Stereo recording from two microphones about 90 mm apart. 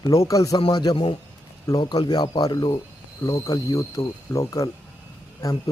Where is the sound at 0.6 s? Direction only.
50° left (ahead or behind).